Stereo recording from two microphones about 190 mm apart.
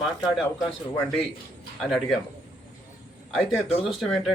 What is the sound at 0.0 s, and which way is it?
Speech, centre (ahead or behind).